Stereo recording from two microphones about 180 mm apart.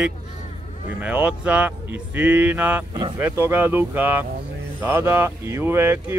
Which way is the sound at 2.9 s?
25° right (ahead or behind).